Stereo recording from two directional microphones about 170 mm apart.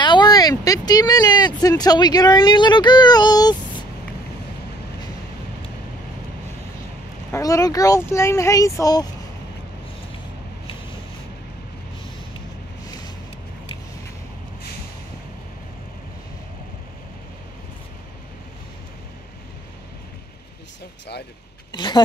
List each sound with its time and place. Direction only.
0.0 s speech: 25° left (ahead or behind)
7.3 s speech: 20° left (ahead or behind)
21.7 s speech: 25° left (ahead or behind)